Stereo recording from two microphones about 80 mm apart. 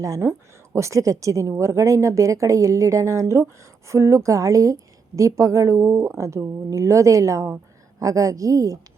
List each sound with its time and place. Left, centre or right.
0.0 s a woman's voice: right